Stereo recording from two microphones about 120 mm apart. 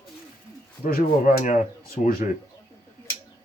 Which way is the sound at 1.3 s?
90° left.